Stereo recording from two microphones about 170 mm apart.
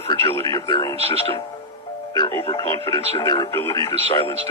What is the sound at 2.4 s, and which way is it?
Speech, 30° left (ahead or behind).